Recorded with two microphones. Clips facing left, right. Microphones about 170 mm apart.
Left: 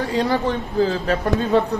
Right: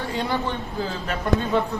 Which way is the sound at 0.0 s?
40° left (ahead or behind).